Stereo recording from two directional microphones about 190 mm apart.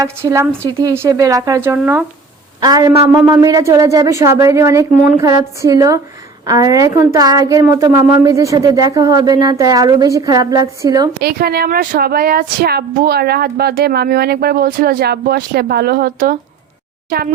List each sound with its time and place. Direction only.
0.0 s a woman's voice: 15° right (ahead or behind)
2.6 s a woman's voice: 20° right (ahead or behind)
11.2 s speech: 55° right (ahead or behind)